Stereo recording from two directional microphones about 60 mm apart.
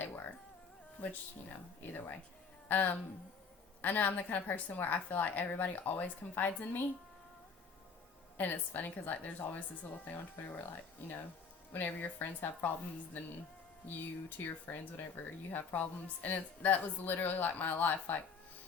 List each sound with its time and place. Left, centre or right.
1.0 s a woman's voice: left
8.4 s a woman's voice: left
11.7 s speech: left
13.8 s speech: left